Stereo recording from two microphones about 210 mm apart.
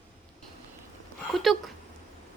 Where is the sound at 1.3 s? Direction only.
Centre (ahead or behind).